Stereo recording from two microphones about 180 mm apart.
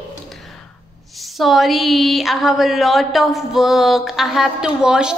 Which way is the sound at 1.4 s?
Centre (ahead or behind).